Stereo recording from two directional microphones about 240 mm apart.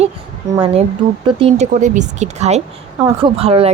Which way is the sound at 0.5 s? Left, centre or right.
Right.